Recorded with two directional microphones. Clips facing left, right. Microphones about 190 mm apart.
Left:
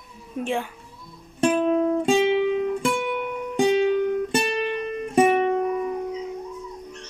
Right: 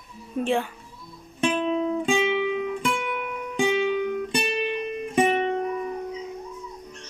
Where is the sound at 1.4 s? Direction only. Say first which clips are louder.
Left 4 dB; 50° left (ahead or behind).